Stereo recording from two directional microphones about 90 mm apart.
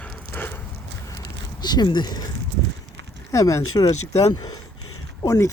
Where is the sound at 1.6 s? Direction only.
50° left (ahead or behind).